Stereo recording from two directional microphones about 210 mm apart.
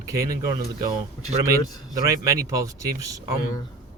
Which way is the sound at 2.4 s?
15° right (ahead or behind).